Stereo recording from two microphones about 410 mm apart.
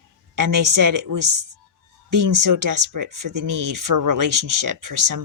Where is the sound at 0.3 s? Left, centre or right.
Right.